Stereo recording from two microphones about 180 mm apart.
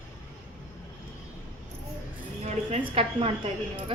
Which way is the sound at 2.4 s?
35° right (ahead or behind).